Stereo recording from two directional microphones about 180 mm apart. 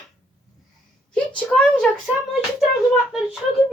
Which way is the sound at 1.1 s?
5° left (ahead or behind).